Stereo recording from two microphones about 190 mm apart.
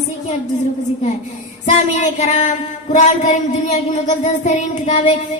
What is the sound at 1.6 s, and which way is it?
Speech, 40° left (ahead or behind).